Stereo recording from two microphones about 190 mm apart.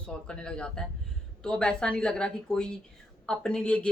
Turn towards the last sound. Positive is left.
turn(degrees=5)  # may be behind; listen again after turning